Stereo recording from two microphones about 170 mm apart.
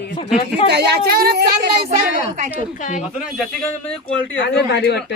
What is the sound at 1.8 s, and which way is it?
Speech, 35° right (ahead or behind).